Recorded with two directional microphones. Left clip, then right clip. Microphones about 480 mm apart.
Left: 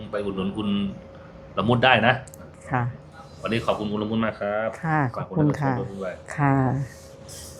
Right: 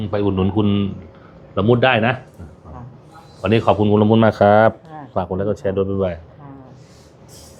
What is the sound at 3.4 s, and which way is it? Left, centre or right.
Speech, right.